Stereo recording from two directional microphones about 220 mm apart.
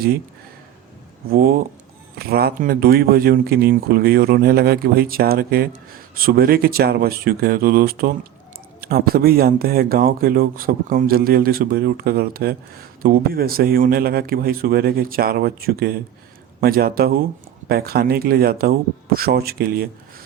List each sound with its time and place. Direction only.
1.3 s speech: 45° right (ahead or behind)